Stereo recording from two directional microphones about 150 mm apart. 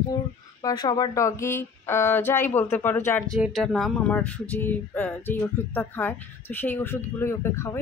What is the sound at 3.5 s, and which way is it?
Speech, centre (ahead or behind).